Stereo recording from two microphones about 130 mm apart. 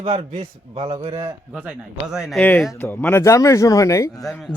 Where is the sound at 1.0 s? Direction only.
60° right (ahead or behind).